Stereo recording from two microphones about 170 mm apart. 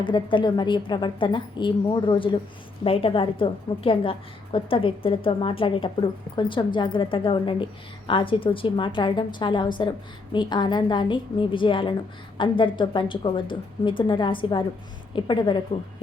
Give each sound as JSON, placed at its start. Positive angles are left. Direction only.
{"t": 0.0, "sound": "a woman's voice", "side_deg": 30}